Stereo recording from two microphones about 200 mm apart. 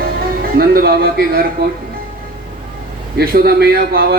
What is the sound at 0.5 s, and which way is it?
Speech, 50° right (ahead or behind).